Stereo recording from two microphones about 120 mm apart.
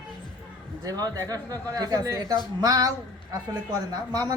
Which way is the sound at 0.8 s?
30° right (ahead or behind).